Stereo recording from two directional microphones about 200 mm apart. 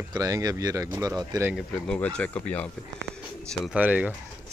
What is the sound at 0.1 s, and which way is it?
Speech, 15° right (ahead or behind).